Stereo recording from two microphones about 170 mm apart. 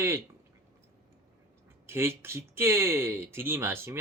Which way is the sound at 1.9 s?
15° right (ahead or behind).